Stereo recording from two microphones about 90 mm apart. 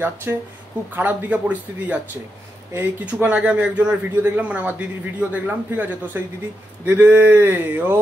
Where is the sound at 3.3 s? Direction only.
15° right (ahead or behind).